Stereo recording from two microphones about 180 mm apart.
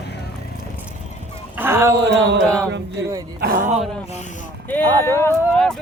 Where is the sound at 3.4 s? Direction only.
50° right (ahead or behind).